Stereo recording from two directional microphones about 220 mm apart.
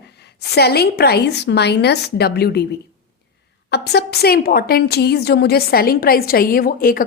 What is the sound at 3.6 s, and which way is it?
A woman's voice, 50° left (ahead or behind).